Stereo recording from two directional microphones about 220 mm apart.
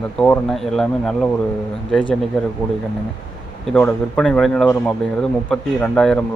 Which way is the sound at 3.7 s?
5° left (ahead or behind).